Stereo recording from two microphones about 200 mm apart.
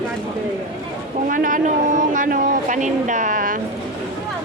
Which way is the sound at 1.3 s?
40° right (ahead or behind).